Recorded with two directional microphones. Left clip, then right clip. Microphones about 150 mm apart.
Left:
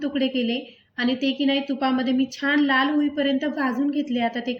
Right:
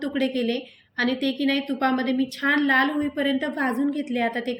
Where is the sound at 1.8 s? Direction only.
45° right (ahead or behind).